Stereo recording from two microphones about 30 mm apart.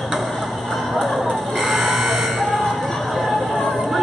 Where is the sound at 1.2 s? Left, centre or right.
Centre.